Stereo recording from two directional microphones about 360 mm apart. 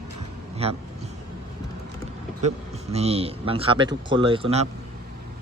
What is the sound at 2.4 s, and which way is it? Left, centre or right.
A man's voice, centre.